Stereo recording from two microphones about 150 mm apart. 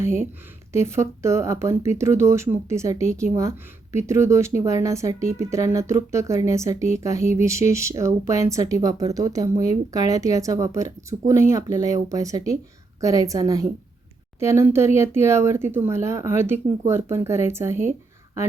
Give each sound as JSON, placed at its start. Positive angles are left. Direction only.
{"t": 0.7, "sound": "speech", "side_deg": -20}